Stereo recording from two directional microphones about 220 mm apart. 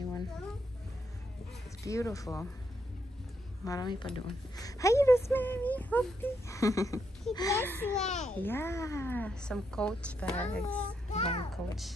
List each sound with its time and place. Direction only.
1.8 s a woman's voice: 15° left (ahead or behind)
3.6 s a woman's voice: 15° left (ahead or behind)
8.0 s a child's voice: 30° left (ahead or behind)
8.4 s speech: 10° left (ahead or behind)
11.1 s a child's voice: 30° left (ahead or behind)
11.5 s speech: centre (ahead or behind)